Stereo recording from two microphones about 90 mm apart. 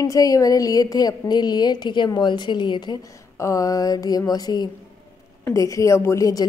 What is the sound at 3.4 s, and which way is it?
A woman's voice, 35° left (ahead or behind).